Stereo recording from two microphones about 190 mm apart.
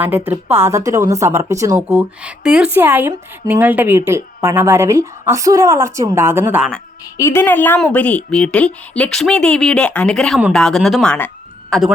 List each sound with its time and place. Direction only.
0.0 s a woman's voice: 10° right (ahead or behind)
7.2 s a woman's voice: 15° left (ahead or behind)